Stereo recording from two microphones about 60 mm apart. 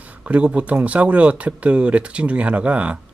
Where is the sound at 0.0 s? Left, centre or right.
Right.